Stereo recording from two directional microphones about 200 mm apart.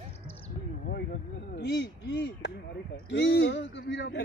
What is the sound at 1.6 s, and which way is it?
Speech, 60° left (ahead or behind).